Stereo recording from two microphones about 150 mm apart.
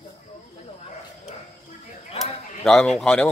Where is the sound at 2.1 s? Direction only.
Centre (ahead or behind).